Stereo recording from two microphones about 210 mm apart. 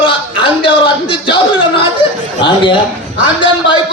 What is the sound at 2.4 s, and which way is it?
Chuckle, 25° left (ahead or behind).